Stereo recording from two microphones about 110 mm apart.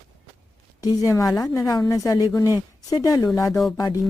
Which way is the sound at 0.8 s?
30° left (ahead or behind).